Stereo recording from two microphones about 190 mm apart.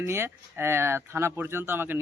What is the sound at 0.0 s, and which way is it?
Speech, 15° right (ahead or behind).